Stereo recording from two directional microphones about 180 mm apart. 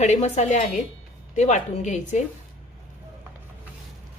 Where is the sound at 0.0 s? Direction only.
40° left (ahead or behind).